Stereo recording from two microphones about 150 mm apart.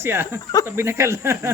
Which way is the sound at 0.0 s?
15° right (ahead or behind).